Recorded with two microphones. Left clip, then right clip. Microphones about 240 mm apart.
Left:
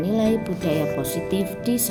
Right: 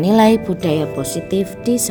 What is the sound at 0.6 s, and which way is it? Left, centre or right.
Speech, right.